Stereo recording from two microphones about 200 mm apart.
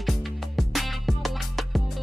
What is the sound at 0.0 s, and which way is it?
Music, centre (ahead or behind).